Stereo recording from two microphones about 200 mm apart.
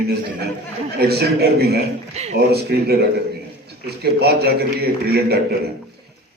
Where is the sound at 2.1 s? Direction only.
35° right (ahead or behind).